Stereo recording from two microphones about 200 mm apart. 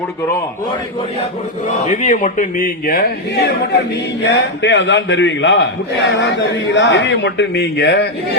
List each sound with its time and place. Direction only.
1.9 s a man's voice: 40° left (ahead or behind)
4.3 s a man's voice: 60° left (ahead or behind)